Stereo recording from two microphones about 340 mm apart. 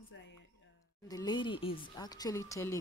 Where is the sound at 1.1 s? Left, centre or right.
Centre.